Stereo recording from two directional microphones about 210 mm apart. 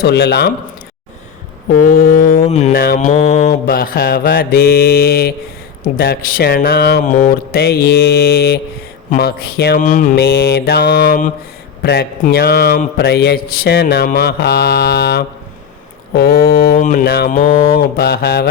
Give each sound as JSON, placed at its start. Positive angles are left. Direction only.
{"t": 0.0, "sound": "a man's voice", "side_deg": 50}
{"t": 1.7, "sound": "mantra", "side_deg": 40}
{"t": 2.7, "sound": "a man's voice", "side_deg": 45}